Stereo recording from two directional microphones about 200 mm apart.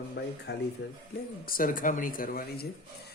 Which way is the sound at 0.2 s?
60° left (ahead or behind).